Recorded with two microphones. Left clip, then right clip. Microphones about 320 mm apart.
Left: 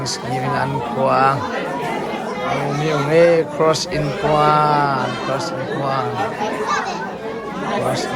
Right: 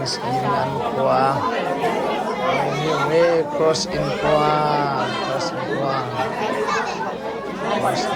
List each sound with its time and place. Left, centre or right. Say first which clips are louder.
1.0 s speech: left 3 dB; centre
3.1 s speech: left 5 dB; centre